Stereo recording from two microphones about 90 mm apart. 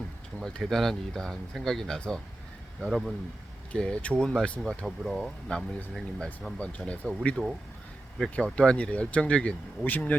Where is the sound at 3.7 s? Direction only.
10° left (ahead or behind).